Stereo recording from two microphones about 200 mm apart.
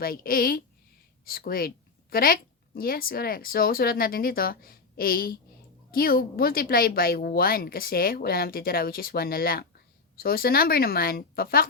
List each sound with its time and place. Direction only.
0.0 s a woman's voice: 45° left (ahead or behind)